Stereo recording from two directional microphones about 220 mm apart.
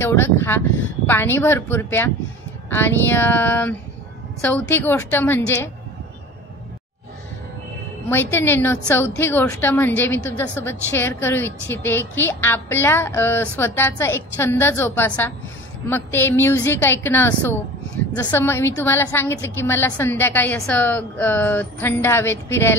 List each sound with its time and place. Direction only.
0.0 s a woman's voice: 10° left (ahead or behind)
8.1 s a woman's voice: 10° left (ahead or behind)